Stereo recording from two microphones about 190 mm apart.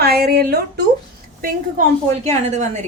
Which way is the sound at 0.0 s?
55° right (ahead or behind).